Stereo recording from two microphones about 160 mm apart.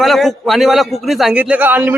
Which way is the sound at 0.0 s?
Centre (ahead or behind).